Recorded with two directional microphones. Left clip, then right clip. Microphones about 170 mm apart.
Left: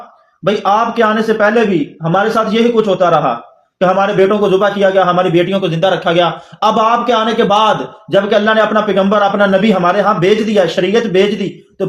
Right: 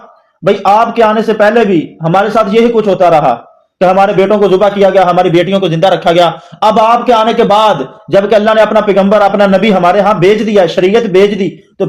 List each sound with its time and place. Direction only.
0.4 s a man's voice: 35° right (ahead or behind)